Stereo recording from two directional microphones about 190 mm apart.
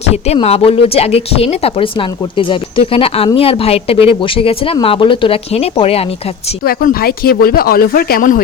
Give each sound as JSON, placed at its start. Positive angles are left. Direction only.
{"t": 0.1, "sound": "speech", "side_deg": 35}
{"t": 6.7, "sound": "speech", "side_deg": 50}